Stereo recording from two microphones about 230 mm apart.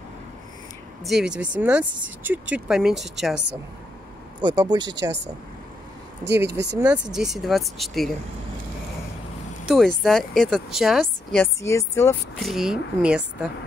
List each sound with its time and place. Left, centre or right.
1.0 s speech: centre
4.4 s speech: centre
6.2 s speech: right
7.2 s speech: centre
9.7 s speech: centre